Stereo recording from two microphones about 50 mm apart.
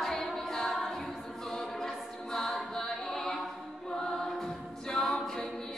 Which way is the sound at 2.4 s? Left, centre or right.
Centre.